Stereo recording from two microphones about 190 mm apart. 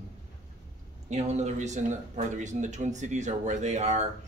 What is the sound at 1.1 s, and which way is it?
Speech, 35° right (ahead or behind).